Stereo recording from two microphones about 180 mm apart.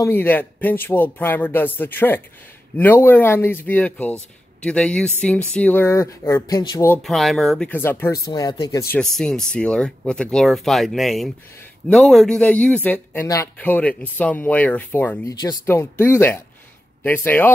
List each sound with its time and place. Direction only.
0.0 s speech: 10° left (ahead or behind)
7.0 s speech: centre (ahead or behind); by 8.8 s 20° left (ahead or behind)
8.9 s speech: 5° left (ahead or behind)